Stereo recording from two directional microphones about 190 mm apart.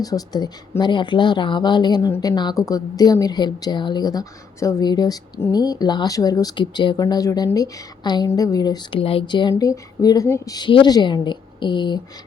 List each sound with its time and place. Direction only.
0.0 s speech: 20° left (ahead or behind)